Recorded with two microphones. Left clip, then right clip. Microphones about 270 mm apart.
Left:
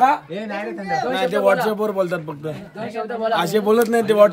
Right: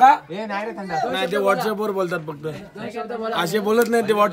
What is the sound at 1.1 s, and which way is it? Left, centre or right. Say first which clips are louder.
Speech: left 3 dB; centre.